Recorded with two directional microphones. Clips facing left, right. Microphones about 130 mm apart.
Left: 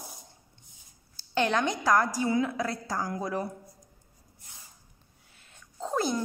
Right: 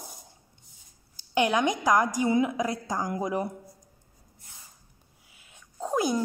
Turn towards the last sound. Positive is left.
turn(degrees=-10)  # may be behind; listen again after turning